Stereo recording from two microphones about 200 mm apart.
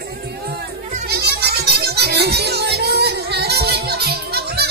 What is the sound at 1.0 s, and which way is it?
Music, 55° right (ahead or behind).